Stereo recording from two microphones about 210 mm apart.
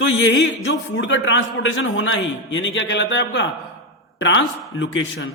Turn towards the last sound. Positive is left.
turn(degrees=60)  # may be behind; listen again after turning